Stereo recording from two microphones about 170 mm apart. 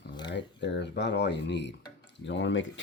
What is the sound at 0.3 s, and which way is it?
Speech, 90° left.